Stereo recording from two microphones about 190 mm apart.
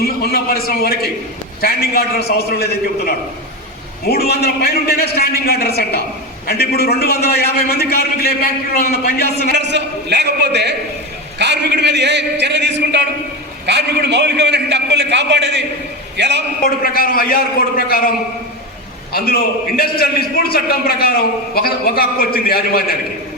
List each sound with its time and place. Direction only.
0.0 s a man's voice: 55° left (ahead or behind)
9.5 s a man's voice: 65° right (ahead or behind)
16.6 s a man's voice: 50° left (ahead or behind)
19.1 s a man's voice: 50° left (ahead or behind)